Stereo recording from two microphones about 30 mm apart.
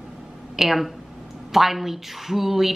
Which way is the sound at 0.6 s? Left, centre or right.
Centre.